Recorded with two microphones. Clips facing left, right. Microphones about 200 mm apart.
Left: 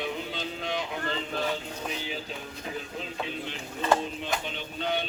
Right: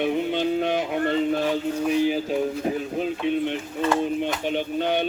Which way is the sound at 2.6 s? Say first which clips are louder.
Right 11 dB; 55° right (ahead or behind).